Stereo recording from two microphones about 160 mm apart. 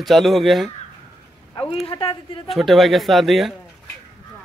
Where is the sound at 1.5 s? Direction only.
35° left (ahead or behind).